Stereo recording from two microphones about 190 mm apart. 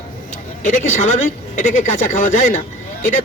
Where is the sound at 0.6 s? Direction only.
40° left (ahead or behind).